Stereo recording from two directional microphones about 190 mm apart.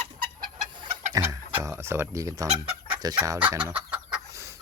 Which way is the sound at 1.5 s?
15° right (ahead or behind).